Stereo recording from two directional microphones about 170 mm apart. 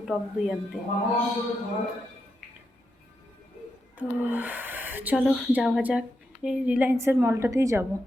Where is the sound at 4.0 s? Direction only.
10° right (ahead or behind).